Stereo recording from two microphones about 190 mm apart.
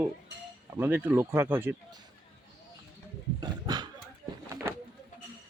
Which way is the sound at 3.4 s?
20° right (ahead or behind).